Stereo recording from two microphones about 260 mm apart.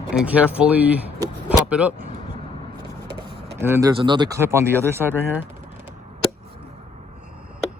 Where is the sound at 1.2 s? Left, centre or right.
Centre.